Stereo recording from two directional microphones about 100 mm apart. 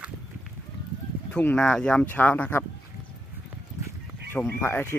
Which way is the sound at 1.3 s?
10° left (ahead or behind).